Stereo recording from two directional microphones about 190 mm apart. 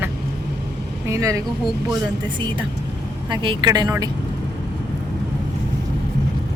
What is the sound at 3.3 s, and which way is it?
Speech, 25° right (ahead or behind).